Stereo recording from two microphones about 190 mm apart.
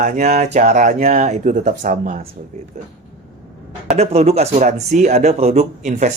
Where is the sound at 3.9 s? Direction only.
35° right (ahead or behind).